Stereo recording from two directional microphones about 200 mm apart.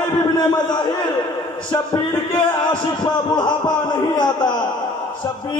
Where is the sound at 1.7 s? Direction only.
20° left (ahead or behind).